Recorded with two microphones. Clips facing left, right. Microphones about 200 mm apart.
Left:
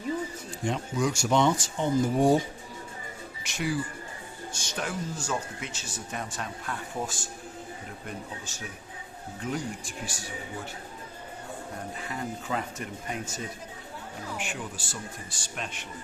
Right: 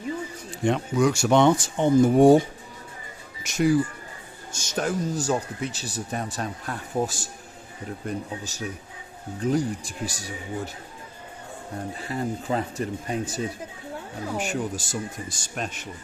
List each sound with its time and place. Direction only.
0.6 s speech: 65° right (ahead or behind)
3.4 s speech: 45° right (ahead or behind)
11.9 s speech: 35° right (ahead or behind)